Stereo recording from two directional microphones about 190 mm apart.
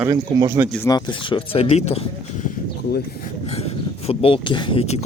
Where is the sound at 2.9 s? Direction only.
55° left (ahead or behind).